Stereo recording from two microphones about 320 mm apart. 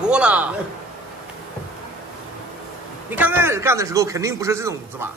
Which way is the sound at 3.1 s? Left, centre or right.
Centre.